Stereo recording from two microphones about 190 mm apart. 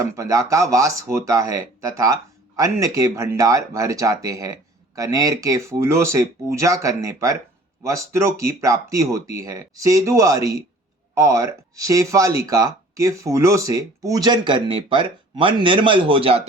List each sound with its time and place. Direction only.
0.0 s speech: 15° right (ahead or behind)